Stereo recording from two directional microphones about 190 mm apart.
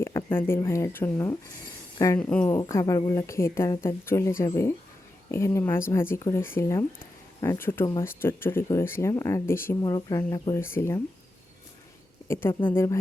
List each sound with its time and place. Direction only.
0.0 s speech: 15° left (ahead or behind)
12.3 s speech: 10° left (ahead or behind)